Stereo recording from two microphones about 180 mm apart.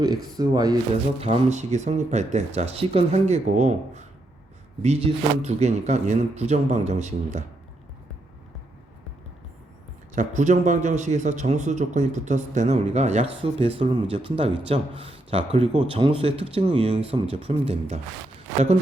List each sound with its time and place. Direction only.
0.3 s speech: 20° right (ahead or behind)
1.2 s a man's voice: 35° right (ahead or behind)
5.4 s a man's voice: 35° right (ahead or behind)
10.2 s a man's voice: 40° right (ahead or behind)